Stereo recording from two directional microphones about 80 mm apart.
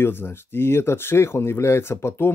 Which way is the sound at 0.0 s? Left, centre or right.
Left.